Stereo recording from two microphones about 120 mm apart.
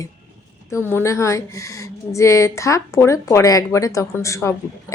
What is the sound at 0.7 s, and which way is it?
Speech, 20° left (ahead or behind).